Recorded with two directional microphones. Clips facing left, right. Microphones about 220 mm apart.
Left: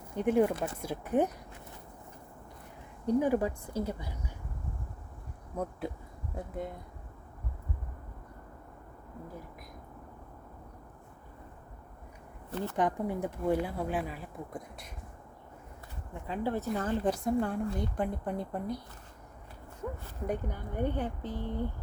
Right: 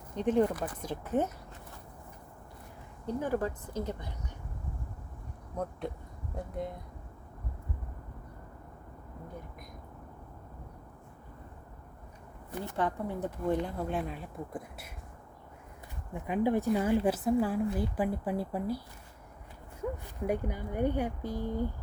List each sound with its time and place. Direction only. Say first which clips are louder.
0.1 s speech: left 1 dB; 10° left (ahead or behind)
0.5 s speech: left 2 dB; 25° left (ahead or behind)
0.8 s speech: left 2 dB; 10° left (ahead or behind)
3.2 s speech: left 3 dB; 15° left (ahead or behind)
6.3 s a woman's voice: right 1 dB; centre (ahead or behind)
12.5 s speech: left 3 dB; 15° right (ahead or behind)
12.7 s speech: left 2 dB; 15° left (ahead or behind); by 14.8 s centre (ahead or behind)
16.2 s a woman's voice: right 5 dB; 15° right (ahead or behind)
20.2 s speech: right 3 dB; 10° right (ahead or behind)